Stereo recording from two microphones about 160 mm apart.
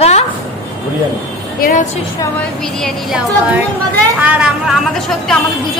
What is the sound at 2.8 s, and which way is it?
A woman's voice, 5° right (ahead or behind).